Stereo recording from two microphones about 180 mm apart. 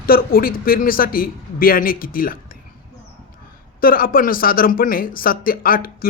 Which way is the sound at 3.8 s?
55° left (ahead or behind).